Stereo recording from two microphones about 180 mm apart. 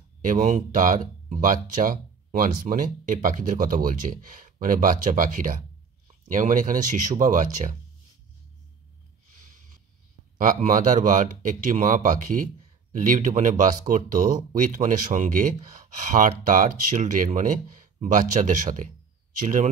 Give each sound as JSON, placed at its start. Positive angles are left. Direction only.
{"t": 0.2, "sound": "speech", "side_deg": -45}
{"t": 10.3, "sound": "speech", "side_deg": -50}